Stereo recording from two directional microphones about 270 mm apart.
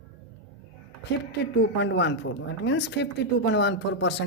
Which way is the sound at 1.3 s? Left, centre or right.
Left.